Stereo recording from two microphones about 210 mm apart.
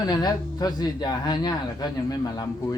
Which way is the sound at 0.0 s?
20° left (ahead or behind).